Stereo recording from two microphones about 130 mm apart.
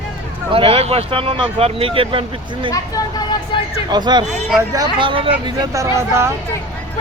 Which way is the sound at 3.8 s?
35° right (ahead or behind).